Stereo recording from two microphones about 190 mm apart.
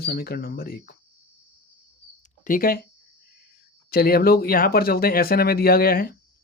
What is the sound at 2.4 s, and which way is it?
Speech, 45° left (ahead or behind).